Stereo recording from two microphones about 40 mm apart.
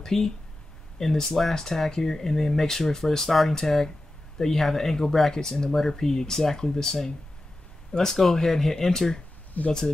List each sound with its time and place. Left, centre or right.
0.0 s speech: centre